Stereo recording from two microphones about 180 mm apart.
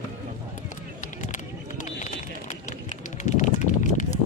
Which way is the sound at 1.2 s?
40° left (ahead or behind).